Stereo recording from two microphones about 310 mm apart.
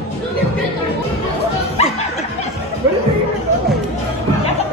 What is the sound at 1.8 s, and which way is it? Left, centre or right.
Snicker, left.